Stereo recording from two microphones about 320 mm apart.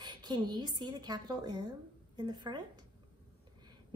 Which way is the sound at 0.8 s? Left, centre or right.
Centre.